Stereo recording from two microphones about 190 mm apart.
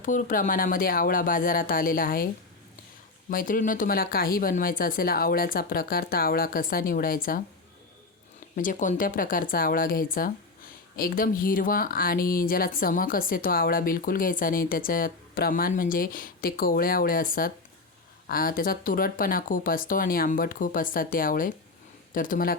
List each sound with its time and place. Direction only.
0.0 s speech: 45° left (ahead or behind)
8.5 s speech: 45° left (ahead or behind)